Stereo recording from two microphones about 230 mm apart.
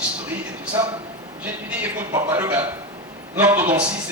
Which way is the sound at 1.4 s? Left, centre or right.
Centre.